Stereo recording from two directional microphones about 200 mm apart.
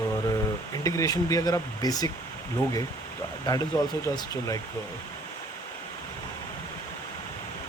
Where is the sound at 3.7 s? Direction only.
10° left (ahead or behind).